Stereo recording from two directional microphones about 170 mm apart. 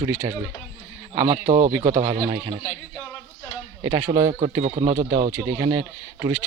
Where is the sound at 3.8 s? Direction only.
15° right (ahead or behind).